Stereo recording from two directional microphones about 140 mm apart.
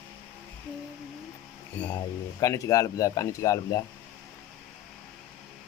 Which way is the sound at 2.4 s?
25° left (ahead or behind).